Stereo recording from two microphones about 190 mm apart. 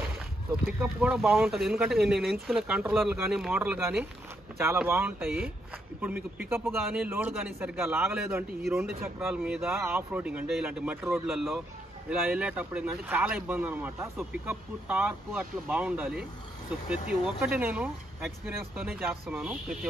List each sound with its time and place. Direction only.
0.7 s speech: 5° right (ahead or behind)